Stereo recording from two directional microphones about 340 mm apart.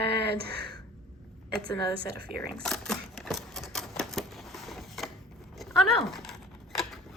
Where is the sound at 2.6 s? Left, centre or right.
Centre.